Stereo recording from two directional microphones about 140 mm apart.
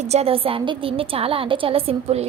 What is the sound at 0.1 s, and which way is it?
A woman's voice, 45° right (ahead or behind).